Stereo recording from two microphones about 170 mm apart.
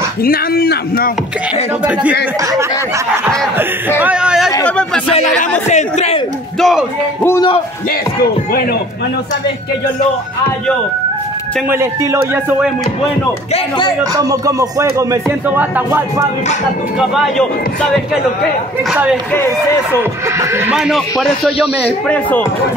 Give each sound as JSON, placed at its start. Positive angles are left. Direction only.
{"t": 0.2, "sound": "speech", "side_deg": 60}
{"t": 4.0, "sound": "a man's voice", "side_deg": -5}
{"t": 4.6, "sound": "speech", "side_deg": 5}
{"t": 5.7, "sound": "a man's voice", "side_deg": 40}
{"t": 6.6, "sound": "speech", "side_deg": 0}
{"t": 7.2, "sound": "speech", "side_deg": 20}
{"t": 11.7, "sound": "speech", "side_deg": -15}
{"t": 13.5, "sound": "speech", "side_deg": 25}
{"t": 14.1, "sound": "music", "side_deg": -20}
{"t": 15.5, "sound": "speech", "side_deg": -15}
{"t": 18.9, "sound": "speech", "side_deg": -5}
{"t": 20.7, "sound": "speech", "side_deg": 0}